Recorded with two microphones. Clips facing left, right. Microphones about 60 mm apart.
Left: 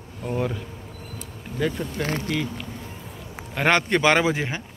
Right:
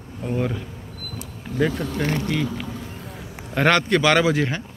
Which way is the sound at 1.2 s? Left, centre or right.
Centre.